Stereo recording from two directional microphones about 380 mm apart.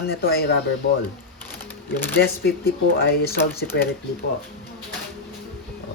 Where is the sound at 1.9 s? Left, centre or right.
Centre.